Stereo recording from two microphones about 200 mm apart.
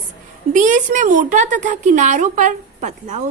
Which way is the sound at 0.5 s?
40° right (ahead or behind).